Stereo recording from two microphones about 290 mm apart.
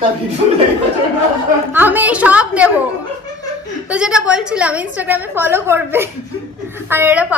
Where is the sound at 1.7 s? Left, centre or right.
Centre.